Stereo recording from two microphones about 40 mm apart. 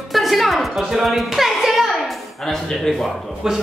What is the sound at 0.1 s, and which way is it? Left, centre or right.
Music, centre.